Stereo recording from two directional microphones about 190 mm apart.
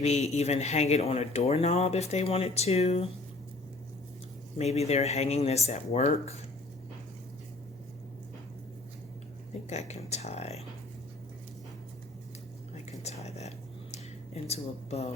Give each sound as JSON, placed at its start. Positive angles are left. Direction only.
{"t": 0.0, "sound": "speech", "side_deg": 35}
{"t": 4.5, "sound": "speech", "side_deg": 35}
{"t": 9.6, "sound": "speech", "side_deg": 35}
{"t": 12.7, "sound": "whispering", "side_deg": 35}
{"t": 13.9, "sound": "a sound", "side_deg": 35}